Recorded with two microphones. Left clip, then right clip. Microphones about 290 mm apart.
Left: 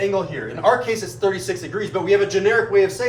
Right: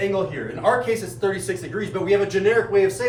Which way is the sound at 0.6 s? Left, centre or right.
Left.